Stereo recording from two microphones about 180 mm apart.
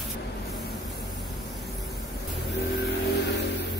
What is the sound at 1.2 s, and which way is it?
Vehicle, centre (ahead or behind).